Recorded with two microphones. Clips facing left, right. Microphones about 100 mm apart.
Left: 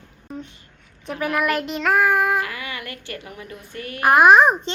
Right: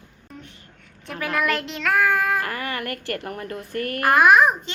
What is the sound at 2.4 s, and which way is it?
A woman's voice, 45° right (ahead or behind).